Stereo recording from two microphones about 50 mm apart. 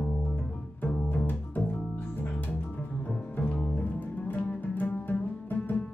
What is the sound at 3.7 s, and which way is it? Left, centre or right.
Music, left.